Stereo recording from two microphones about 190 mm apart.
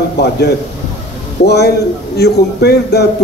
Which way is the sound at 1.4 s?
60° left (ahead or behind).